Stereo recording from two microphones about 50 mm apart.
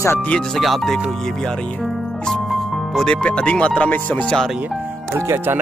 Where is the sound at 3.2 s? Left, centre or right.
Left.